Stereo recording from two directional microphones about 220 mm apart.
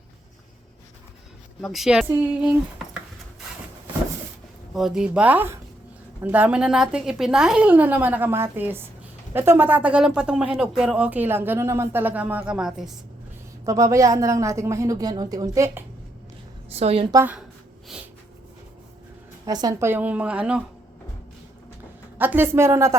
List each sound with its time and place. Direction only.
1.6 s speech: centre (ahead or behind)
4.7 s speech: centre (ahead or behind)
13.7 s speech: 15° right (ahead or behind)
16.7 s a woman's voice: 25° right (ahead or behind)
17.2 s speech: 10° right (ahead or behind)
19.5 s speech: 15° right (ahead or behind)
22.2 s speech: 10° right (ahead or behind)